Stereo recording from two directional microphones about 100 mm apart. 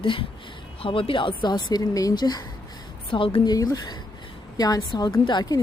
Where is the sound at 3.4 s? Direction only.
40° left (ahead or behind).